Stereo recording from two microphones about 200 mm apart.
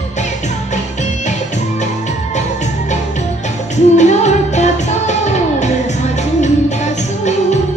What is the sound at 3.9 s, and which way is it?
Music, 35° left (ahead or behind).